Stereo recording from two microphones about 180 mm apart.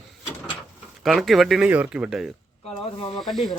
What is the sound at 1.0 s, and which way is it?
Speech, centre (ahead or behind).